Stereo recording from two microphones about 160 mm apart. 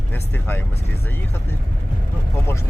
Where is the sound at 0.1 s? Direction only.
15° left (ahead or behind).